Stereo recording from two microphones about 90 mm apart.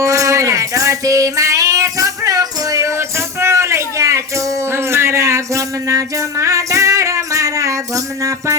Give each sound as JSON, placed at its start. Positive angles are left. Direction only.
{"t": 0.0, "sound": "female singing", "side_deg": -35}